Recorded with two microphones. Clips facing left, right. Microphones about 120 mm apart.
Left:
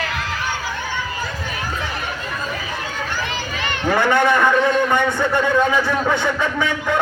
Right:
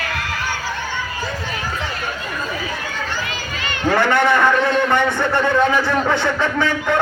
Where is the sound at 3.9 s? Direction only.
15° left (ahead or behind).